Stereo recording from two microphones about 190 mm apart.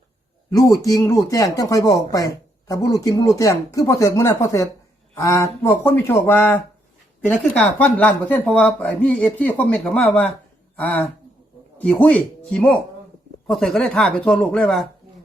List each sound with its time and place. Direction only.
0.7 s speech: 20° left (ahead or behind); by 14.8 s centre (ahead or behind)